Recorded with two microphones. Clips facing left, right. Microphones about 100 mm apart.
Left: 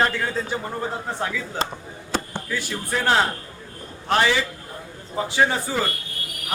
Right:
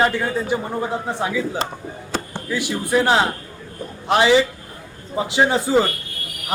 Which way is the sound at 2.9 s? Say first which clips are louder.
Right 3 dB; 15° right (ahead or behind).